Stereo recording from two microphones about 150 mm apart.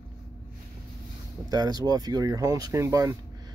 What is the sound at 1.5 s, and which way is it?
Speech, 25° right (ahead or behind).